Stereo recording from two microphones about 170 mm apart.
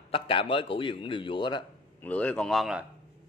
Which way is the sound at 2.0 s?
10° left (ahead or behind).